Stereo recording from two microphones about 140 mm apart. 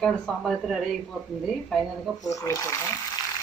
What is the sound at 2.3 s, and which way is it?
Speech, 20° left (ahead or behind).